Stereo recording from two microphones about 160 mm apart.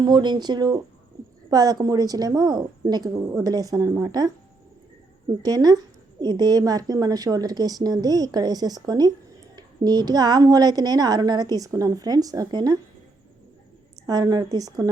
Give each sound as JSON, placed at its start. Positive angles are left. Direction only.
{"t": 0.0, "sound": "a woman's voice", "side_deg": -30}
{"t": 5.4, "sound": "a woman's voice", "side_deg": -25}
{"t": 14.1, "sound": "a woman's voice", "side_deg": -25}